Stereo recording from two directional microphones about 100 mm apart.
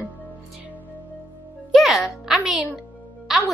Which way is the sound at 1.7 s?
Centre (ahead or behind).